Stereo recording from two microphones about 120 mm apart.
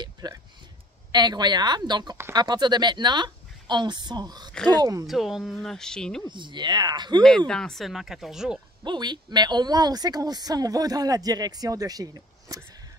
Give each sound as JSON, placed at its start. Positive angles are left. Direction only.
{"t": 0.0, "sound": "a sound", "side_deg": -35}
{"t": 1.1, "sound": "speech", "side_deg": -35}
{"t": 5.0, "sound": "speech", "side_deg": 0}
{"t": 6.2, "sound": "speech", "side_deg": -40}
{"t": 7.2, "sound": "speech", "side_deg": 5}
{"t": 8.8, "sound": "speech", "side_deg": -40}